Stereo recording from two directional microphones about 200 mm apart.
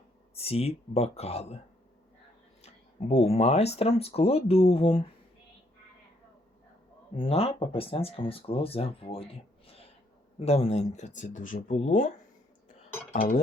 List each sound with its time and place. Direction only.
0.3 s speech: 30° left (ahead or behind)
2.6 s speech: 30° left (ahead or behind)
7.2 s speech: 30° left (ahead or behind)
10.4 s speech: 30° left (ahead or behind)
13.1 s speech: 40° left (ahead or behind)